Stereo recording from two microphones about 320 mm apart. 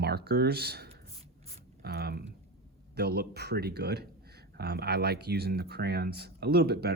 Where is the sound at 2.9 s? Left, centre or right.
Right.